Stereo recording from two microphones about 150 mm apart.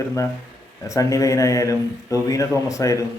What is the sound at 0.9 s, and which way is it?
Speech, 20° left (ahead or behind).